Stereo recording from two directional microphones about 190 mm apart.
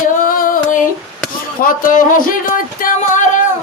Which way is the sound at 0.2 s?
45° left (ahead or behind).